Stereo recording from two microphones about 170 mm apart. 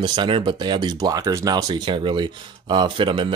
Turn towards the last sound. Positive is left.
turn(degrees=-30)  # may be behind; listen again after turning